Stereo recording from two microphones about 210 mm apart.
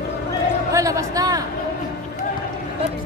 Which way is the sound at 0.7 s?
15° right (ahead or behind).